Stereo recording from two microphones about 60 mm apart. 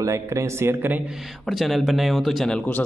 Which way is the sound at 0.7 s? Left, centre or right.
Right.